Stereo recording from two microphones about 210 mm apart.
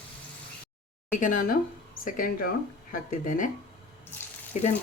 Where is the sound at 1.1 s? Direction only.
40° left (ahead or behind).